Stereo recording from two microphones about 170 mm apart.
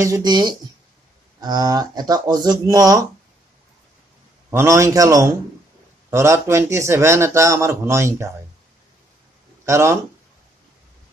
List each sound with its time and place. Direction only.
0.0 s speech: 20° right (ahead or behind)
4.5 s a man's voice: 15° right (ahead or behind)
9.7 s a man's voice: 15° right (ahead or behind)